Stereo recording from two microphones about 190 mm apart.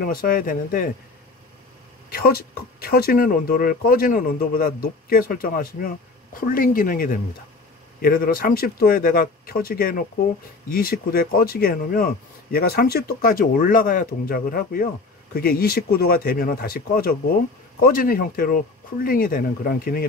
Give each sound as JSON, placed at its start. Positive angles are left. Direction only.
{"t": 0.0, "sound": "speech", "side_deg": 50}
{"t": 2.0, "sound": "speech", "side_deg": 50}